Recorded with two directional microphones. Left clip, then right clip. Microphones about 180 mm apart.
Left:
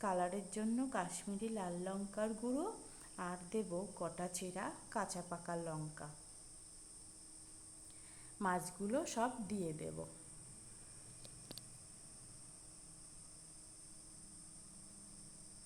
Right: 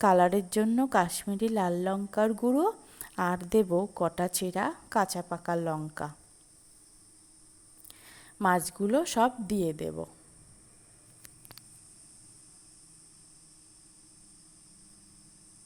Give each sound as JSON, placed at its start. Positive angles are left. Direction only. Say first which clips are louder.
{"t": 0.0, "sound": "speech", "louder": "right 16 dB", "side_deg": -45}
{"t": 7.9, "sound": "a sound", "louder": "right 8 dB", "side_deg": -40}
{"t": 8.4, "sound": "speech", "louder": "right 13 dB", "side_deg": -40}